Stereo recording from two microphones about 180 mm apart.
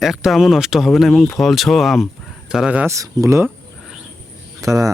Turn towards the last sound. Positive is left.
turn(degrees=-20)  # may be behind; listen again after turning